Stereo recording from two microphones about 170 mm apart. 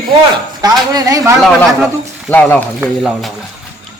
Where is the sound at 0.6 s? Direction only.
25° right (ahead or behind).